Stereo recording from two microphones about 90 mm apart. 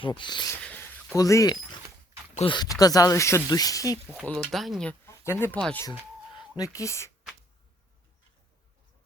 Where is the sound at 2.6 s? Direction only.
45° left (ahead or behind).